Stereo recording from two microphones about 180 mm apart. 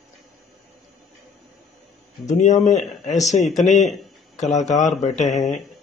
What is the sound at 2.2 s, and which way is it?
A man's voice, 40° left (ahead or behind).